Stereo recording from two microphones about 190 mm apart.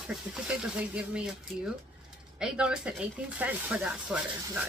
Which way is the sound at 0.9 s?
5° right (ahead or behind).